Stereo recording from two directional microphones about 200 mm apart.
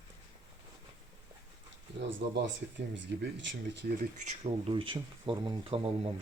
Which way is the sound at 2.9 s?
65° right (ahead or behind).